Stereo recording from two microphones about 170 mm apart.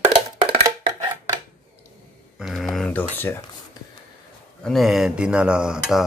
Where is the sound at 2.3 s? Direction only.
Centre (ahead or behind).